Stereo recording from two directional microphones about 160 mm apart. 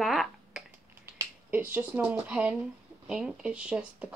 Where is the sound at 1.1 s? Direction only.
10° right (ahead or behind).